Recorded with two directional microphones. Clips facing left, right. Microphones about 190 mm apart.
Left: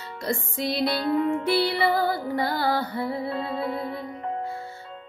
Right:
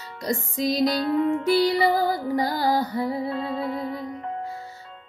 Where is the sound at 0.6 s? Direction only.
40° right (ahead or behind).